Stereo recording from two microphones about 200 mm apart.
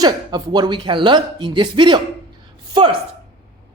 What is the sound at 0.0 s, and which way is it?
Speech, 20° right (ahead or behind).